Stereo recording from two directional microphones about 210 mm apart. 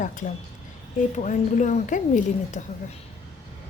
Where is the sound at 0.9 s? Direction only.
35° left (ahead or behind).